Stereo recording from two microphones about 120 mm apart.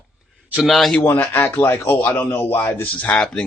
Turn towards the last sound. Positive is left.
turn(degrees=10)  # may be behind; listen again after turning